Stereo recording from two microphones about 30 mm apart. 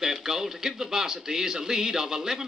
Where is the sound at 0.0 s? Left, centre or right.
Centre.